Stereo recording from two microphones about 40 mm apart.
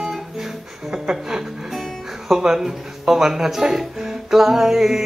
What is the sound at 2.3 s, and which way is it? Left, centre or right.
Speech, centre.